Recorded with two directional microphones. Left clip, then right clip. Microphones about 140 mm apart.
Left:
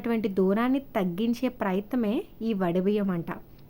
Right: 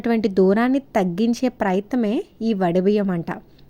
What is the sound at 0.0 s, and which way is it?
A woman's voice, 35° right (ahead or behind).